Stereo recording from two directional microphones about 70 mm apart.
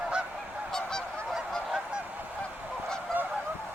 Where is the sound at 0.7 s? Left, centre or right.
Centre.